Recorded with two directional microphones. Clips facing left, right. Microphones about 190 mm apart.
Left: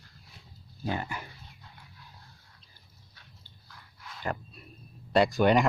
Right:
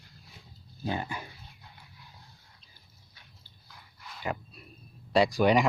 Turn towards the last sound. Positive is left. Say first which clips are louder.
# even
turn(degrees=0)  # may be behind; listen again after turning